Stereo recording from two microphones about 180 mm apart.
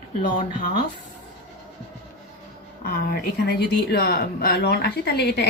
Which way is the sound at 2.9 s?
55° left (ahead or behind).